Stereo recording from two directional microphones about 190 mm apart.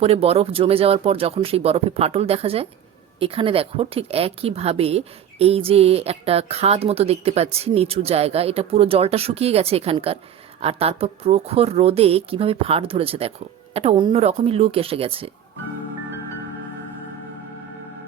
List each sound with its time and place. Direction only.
0.0 s a woman's voice: 30° right (ahead or behind)